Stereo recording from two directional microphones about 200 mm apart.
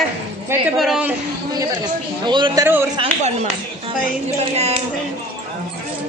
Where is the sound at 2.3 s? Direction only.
20° right (ahead or behind).